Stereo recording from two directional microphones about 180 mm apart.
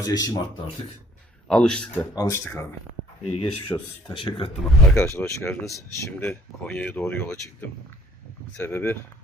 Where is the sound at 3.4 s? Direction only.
25° left (ahead or behind).